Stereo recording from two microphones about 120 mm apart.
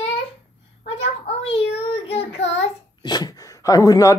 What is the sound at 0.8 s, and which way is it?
Child singing, 60° left (ahead or behind).